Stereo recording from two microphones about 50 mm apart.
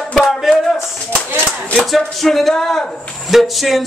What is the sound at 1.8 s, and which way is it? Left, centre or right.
A man's voice, centre.